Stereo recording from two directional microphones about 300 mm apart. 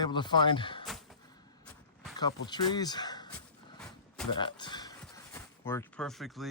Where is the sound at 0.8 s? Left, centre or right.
Centre.